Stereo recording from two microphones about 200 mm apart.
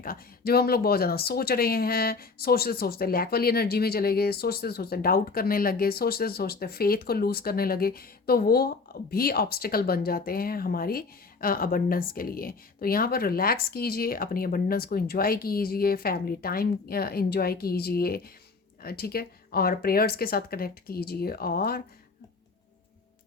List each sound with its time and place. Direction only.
0.0 s speech: 50° left (ahead or behind)